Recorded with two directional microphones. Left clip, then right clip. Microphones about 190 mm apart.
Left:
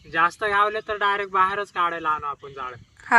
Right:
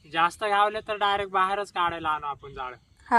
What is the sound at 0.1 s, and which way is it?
Speech, 25° right (ahead or behind).